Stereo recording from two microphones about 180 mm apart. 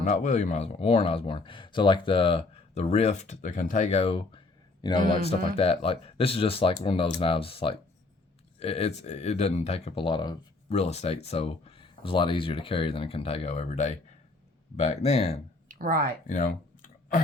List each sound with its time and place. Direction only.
0.0 s speech: 40° left (ahead or behind)
4.8 s a man's voice: 25° left (ahead or behind)
10.8 s speech: 35° left (ahead or behind)
15.7 s speech: 50° right (ahead or behind)
16.2 s a sound: 45° left (ahead or behind)